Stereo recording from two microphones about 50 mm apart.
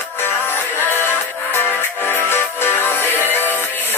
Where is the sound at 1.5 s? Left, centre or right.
Left.